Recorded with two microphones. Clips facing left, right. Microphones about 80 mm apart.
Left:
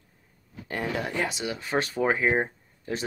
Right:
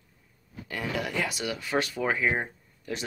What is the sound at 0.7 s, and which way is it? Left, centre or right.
Speech, left.